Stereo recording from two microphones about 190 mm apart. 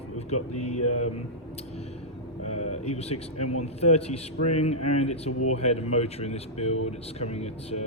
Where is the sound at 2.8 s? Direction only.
35° left (ahead or behind).